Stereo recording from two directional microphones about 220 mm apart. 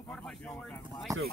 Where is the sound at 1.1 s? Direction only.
15° right (ahead or behind).